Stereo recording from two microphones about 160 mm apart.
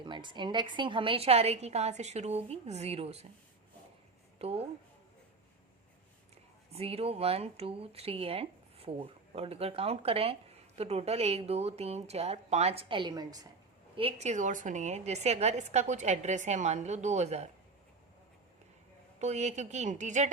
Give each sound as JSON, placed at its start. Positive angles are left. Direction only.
{"t": 0.0, "sound": "speech", "side_deg": -30}
{"t": 4.4, "sound": "a woman's voice", "side_deg": -40}
{"t": 6.7, "sound": "speech", "side_deg": -40}
{"t": 13.9, "sound": "a woman's voice", "side_deg": -40}
{"t": 19.2, "sound": "a woman's voice", "side_deg": -45}